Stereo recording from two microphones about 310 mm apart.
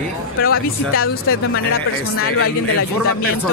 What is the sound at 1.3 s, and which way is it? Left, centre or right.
Speech, left.